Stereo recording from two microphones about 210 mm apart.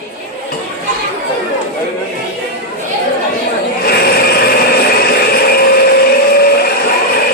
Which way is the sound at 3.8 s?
50° left (ahead or behind).